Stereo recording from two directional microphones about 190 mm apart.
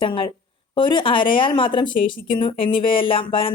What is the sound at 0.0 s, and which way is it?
A woman's voice, 25° left (ahead or behind).